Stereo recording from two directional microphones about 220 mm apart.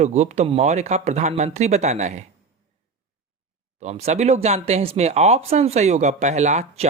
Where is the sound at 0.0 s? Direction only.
30° right (ahead or behind).